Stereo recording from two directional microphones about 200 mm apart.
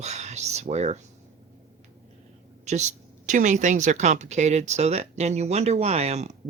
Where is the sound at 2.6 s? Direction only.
35° right (ahead or behind).